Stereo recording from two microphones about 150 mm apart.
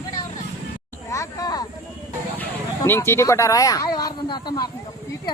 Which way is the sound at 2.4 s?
15° left (ahead or behind).